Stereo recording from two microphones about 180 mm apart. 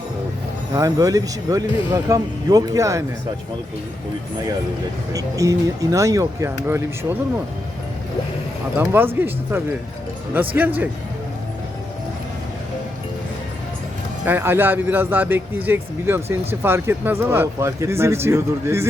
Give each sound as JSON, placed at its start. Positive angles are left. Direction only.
{"t": 0.7, "sound": "speech", "side_deg": -20}
{"t": 5.1, "sound": "speech", "side_deg": -20}
{"t": 8.8, "sound": "speech", "side_deg": -15}
{"t": 14.3, "sound": "speech", "side_deg": -10}